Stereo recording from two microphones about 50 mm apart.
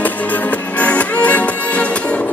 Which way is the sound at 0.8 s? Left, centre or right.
Left.